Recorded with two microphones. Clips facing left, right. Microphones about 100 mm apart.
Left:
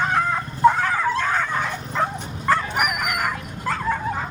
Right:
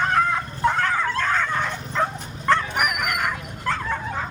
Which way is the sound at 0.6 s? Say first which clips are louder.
Left 5 dB; 10° left (ahead or behind).